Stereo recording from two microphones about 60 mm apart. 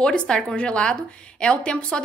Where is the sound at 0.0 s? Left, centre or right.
Centre.